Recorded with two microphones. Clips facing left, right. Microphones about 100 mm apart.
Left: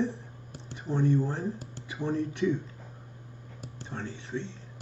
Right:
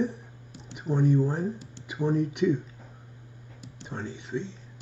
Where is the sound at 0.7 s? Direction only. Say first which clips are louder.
Right 2 dB; 15° right (ahead or behind).